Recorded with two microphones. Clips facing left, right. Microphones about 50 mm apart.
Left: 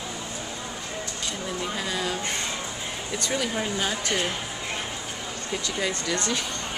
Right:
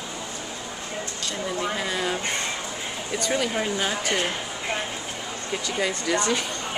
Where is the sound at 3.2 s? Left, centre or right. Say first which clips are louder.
Right 3 dB; centre.